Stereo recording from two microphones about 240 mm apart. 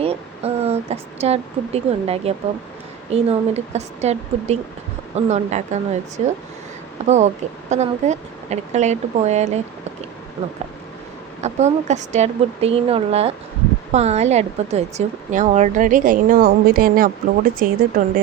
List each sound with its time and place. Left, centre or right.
0.0 s speech: right
11.3 s a woman's voice: right